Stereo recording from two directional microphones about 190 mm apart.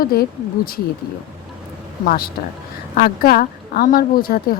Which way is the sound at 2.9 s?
50° left (ahead or behind).